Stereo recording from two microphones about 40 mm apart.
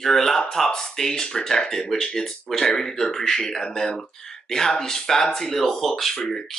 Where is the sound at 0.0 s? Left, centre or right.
Centre.